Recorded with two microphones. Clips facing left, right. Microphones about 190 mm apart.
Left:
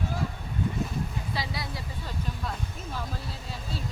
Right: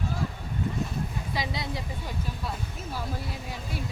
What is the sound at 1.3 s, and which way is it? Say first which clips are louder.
Speech: right 2 dB; 20° right (ahead or behind).